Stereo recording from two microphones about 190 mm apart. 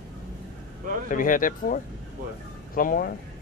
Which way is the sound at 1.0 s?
45° left (ahead or behind).